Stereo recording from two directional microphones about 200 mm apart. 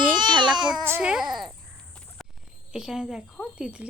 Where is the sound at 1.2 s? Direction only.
20° right (ahead or behind).